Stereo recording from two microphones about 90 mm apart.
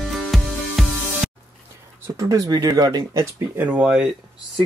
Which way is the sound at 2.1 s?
40° right (ahead or behind).